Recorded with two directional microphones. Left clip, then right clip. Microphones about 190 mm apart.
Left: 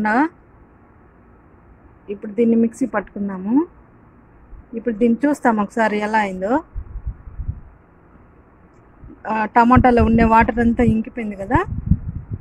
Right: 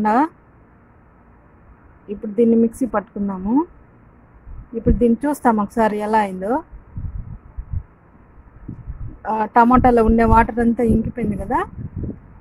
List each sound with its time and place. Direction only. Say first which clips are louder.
0.0 s speech: right 1 dB; 15° right (ahead or behind)
2.0 s speech: right 2 dB; 15° right (ahead or behind)
4.7 s speech: right 1 dB; 15° right (ahead or behind)
9.2 s speech: right 1 dB; 15° right (ahead or behind)